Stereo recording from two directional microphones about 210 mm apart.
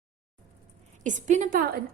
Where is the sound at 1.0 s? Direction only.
35° right (ahead or behind).